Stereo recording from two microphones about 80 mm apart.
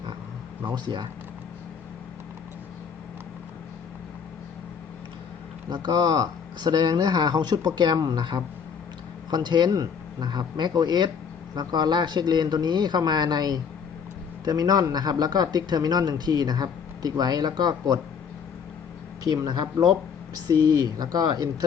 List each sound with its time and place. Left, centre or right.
0.6 s speech: right
5.6 s speech: right
19.2 s speech: right